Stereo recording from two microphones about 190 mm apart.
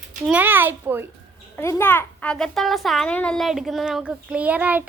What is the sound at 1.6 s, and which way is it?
A child's voice, 15° left (ahead or behind).